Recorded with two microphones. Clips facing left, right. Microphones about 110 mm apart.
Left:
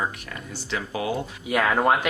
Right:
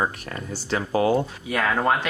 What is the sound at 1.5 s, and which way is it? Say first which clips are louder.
Speech: left 3 dB; 15° left (ahead or behind).